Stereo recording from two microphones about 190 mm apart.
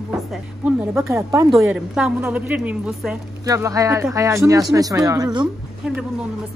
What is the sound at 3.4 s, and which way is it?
A woman's voice, 20° right (ahead or behind).